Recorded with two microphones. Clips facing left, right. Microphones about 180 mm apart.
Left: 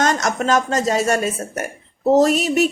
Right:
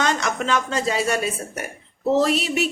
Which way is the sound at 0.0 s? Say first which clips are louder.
Left 4 dB; 45° left (ahead or behind).